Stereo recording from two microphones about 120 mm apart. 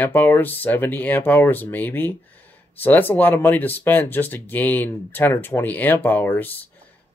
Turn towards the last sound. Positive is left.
turn(degrees=15)  # may be behind; listen again after turning